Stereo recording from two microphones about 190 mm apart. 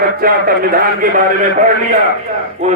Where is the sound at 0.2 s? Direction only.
50° right (ahead or behind).